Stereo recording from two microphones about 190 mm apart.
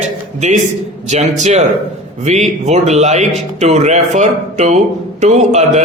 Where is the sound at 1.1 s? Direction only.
35° right (ahead or behind).